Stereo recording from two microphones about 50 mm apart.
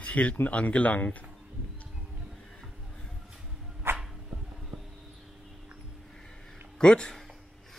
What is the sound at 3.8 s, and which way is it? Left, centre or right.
Dog, right.